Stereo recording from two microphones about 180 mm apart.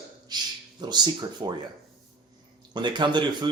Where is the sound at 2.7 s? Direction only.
25° right (ahead or behind).